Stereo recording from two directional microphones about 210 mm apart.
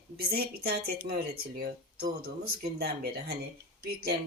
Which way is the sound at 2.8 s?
45° right (ahead or behind).